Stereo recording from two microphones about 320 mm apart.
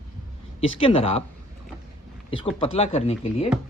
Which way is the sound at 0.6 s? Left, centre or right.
Centre.